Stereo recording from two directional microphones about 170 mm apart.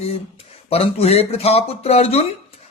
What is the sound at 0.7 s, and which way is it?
Speech, 35° left (ahead or behind).